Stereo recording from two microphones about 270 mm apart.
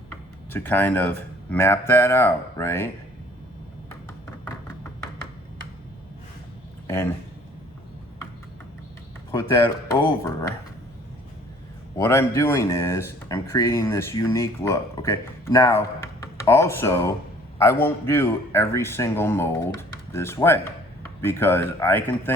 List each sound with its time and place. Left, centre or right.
0.5 s speech: centre
4.4 s music: centre
6.8 s speech: centre
9.9 s speech: centre
11.9 s speech: centre